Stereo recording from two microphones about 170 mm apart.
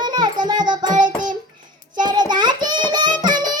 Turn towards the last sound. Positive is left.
turn(degrees=-25)  # may be behind; listen again after turning